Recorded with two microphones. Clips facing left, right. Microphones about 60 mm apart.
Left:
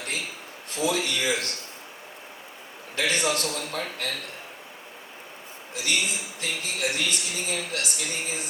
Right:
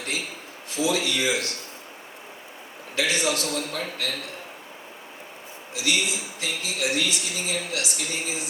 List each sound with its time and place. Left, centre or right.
0.7 s speech: left
2.9 s a man's voice: left
5.7 s speech: left